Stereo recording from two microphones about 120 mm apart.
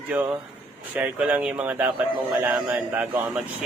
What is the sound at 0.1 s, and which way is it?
A man's voice, 10° right (ahead or behind).